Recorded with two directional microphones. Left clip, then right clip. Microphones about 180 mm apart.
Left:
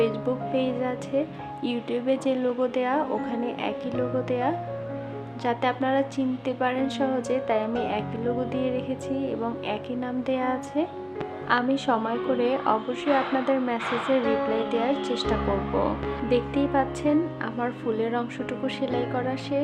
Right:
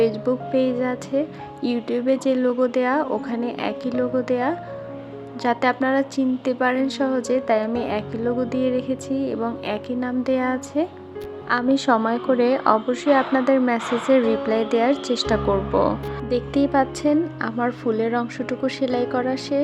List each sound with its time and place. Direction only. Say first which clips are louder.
0.3 s a woman's voice: right 5 dB; 25° right (ahead or behind)